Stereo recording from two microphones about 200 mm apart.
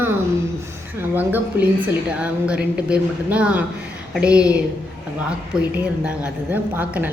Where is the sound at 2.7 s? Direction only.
5° right (ahead or behind).